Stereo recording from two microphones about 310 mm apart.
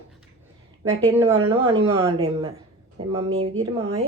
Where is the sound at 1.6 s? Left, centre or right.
Centre.